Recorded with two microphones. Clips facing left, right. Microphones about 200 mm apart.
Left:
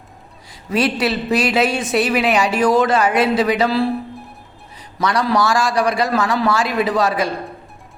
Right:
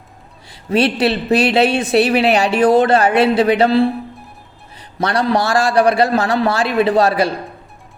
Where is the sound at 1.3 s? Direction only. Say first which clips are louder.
Right 4 dB; 30° right (ahead or behind).